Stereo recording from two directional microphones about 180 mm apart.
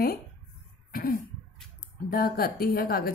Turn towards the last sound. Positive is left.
turn(degrees=55)  # may be behind; listen again after turning